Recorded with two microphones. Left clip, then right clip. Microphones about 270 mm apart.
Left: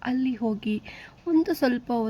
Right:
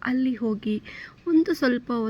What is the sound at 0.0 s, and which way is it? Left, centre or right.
Speech, centre.